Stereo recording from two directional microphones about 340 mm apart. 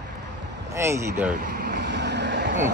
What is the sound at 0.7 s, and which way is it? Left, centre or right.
Speech, centre.